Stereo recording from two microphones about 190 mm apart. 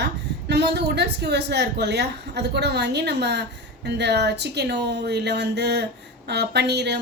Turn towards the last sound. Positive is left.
turn(degrees=-60)  # may be behind; listen again after turning